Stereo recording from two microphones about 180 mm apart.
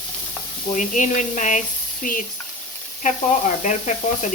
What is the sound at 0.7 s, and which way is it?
Speech, 45° left (ahead or behind).